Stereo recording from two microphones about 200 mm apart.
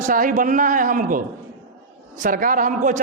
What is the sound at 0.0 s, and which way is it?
A man's voice, 45° right (ahead or behind).